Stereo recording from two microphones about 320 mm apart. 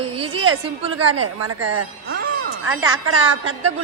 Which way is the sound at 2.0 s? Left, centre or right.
Right.